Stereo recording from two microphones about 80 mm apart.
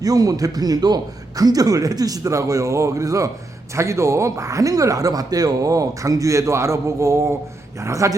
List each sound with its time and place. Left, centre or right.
0.0 s a man's voice: right